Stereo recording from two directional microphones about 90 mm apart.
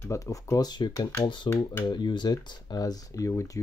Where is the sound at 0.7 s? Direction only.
55° left (ahead or behind).